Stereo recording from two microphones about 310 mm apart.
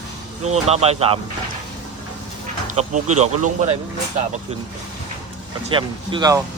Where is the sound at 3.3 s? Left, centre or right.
Right.